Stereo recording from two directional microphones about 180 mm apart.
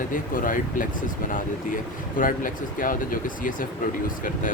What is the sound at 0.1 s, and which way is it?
Speech, 50° left (ahead or behind).